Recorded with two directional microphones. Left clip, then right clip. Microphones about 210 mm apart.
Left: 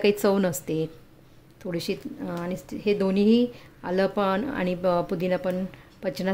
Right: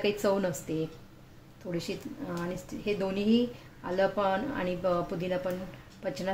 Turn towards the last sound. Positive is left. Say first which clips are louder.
# left 5 dB
turn(degrees=50)  # may be behind; listen again after turning